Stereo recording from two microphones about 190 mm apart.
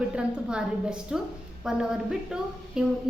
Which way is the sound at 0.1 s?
5° right (ahead or behind).